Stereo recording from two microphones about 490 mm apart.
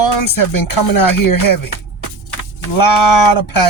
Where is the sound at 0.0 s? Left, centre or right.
Left.